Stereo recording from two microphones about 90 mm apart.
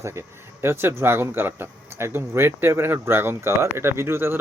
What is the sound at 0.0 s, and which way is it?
A man's voice, 30° right (ahead or behind).